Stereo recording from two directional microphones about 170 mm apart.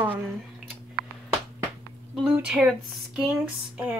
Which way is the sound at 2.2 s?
5° right (ahead or behind).